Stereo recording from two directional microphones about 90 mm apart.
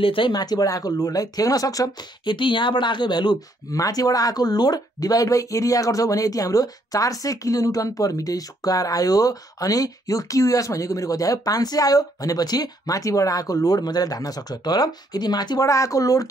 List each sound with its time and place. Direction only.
0.0 s speech: 75° left (ahead or behind)
0.3 s speech: 45° left (ahead or behind)
2.2 s speech: 65° left (ahead or behind)
15.7 s speech: 35° left (ahead or behind)